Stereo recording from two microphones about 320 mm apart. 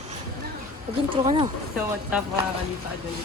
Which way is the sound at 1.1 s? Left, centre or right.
Centre.